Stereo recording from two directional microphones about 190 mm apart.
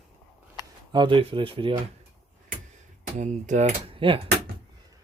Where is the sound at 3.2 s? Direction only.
40° right (ahead or behind).